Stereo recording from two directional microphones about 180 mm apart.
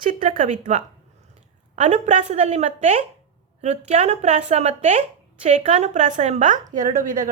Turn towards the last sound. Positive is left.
turn(degrees=-45)  # may be behind; listen again after turning